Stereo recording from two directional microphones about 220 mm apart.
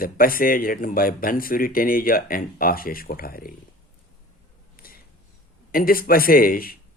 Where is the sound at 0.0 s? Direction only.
40° left (ahead or behind).